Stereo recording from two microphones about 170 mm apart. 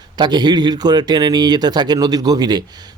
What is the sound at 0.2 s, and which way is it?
Speech, 25° right (ahead or behind).